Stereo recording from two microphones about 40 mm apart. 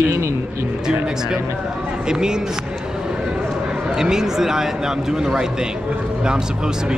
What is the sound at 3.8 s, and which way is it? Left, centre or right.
A man's voice, centre.